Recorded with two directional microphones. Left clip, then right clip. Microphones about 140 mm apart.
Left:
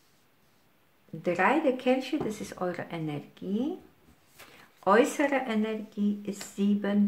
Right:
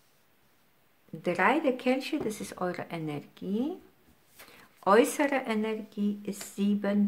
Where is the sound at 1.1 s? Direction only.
40° right (ahead or behind).